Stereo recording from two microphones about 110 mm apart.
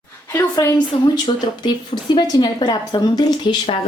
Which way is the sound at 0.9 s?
65° left (ahead or behind).